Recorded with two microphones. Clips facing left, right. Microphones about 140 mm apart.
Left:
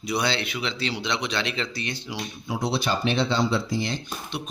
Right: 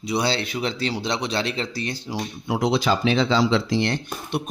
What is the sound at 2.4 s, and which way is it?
Speech, 70° right (ahead or behind).